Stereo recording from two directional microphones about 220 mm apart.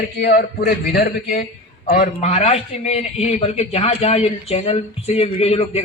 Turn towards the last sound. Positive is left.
turn(degrees=25)  # may be behind; listen again after turning